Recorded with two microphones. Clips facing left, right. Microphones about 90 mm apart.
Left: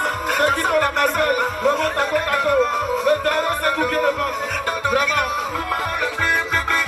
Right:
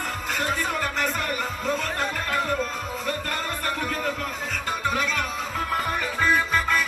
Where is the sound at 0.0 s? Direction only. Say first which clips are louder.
Left 9 dB; 65° left (ahead or behind).